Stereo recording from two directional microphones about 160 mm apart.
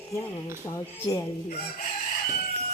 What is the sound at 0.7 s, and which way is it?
Speech, 20° left (ahead or behind).